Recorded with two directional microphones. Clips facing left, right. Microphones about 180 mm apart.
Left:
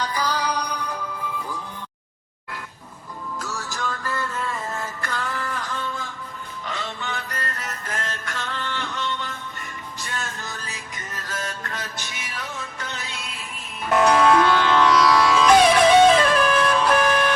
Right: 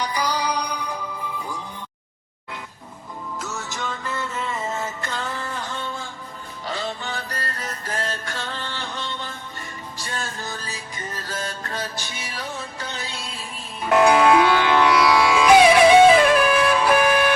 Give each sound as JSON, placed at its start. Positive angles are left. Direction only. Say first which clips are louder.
{"t": 0.0, "sound": "music", "louder": "right 1 dB", "side_deg": -15}
{"t": 3.4, "sound": "music", "louder": "left 1 dB", "side_deg": -20}
{"t": 13.9, "sound": "music", "louder": "right 2 dB", "side_deg": -5}